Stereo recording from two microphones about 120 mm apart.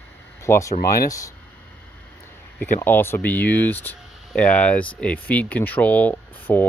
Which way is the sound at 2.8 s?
20° left (ahead or behind).